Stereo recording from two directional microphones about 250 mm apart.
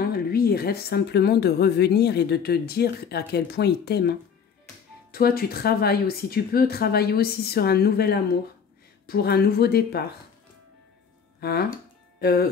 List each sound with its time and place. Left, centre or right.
0.0 s speech: left
5.1 s speech: left
12.2 s speech: left